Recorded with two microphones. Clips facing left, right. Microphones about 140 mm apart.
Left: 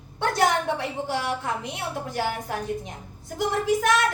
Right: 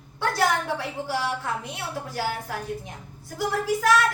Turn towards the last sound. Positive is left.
turn(degrees=20)  # may be behind; listen again after turning